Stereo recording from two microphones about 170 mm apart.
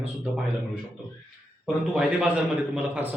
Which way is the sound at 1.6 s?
5° right (ahead or behind).